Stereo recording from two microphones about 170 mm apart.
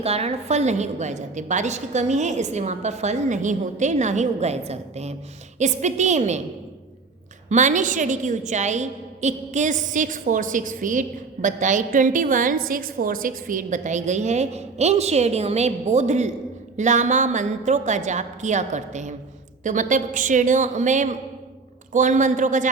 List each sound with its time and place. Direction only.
0.0 s a woman's voice: 35° right (ahead or behind)
7.5 s a woman's voice: 45° right (ahead or behind)